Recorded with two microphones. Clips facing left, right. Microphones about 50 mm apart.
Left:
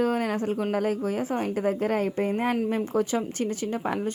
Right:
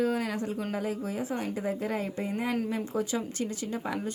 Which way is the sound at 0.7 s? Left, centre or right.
Left.